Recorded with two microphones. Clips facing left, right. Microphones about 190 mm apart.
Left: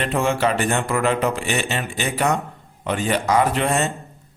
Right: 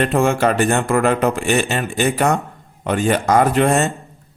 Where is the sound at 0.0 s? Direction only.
50° right (ahead or behind).